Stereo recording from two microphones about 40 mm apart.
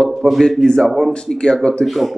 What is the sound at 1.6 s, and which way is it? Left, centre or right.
Speech, left.